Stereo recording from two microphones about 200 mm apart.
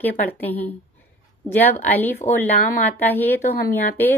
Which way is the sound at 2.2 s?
35° left (ahead or behind).